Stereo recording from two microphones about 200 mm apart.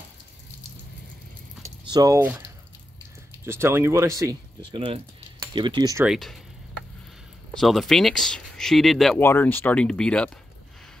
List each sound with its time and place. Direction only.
1.9 s speech: 15° right (ahead or behind)
6.0 s speech: centre (ahead or behind)
7.5 s speech: centre (ahead or behind)